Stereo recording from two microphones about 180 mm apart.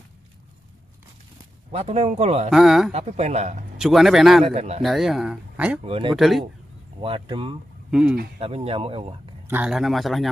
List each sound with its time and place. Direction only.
1.7 s speech: 35° right (ahead or behind)
2.5 s speech: centre (ahead or behind)
2.9 s speech: 35° right (ahead or behind)
3.7 s speech: centre (ahead or behind)
4.5 s speech: 35° right (ahead or behind)
4.8 s speech: centre (ahead or behind)
5.9 s speech: 30° right (ahead or behind)
6.1 s speech: centre (ahead or behind)
7.0 s speech: 30° right (ahead or behind)
7.9 s speech: 5° right (ahead or behind)
8.4 s speech: 35° right (ahead or behind)
9.5 s speech: 5° right (ahead or behind)